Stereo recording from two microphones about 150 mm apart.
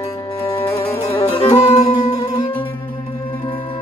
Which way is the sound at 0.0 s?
20° left (ahead or behind).